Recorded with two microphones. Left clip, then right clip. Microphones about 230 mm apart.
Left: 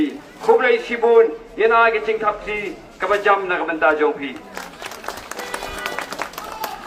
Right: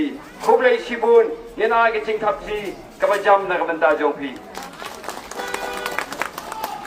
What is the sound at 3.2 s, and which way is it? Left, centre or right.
Speech, right.